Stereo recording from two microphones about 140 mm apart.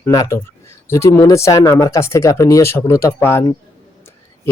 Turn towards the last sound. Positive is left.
turn(degrees=20)  # may be behind; listen again after turning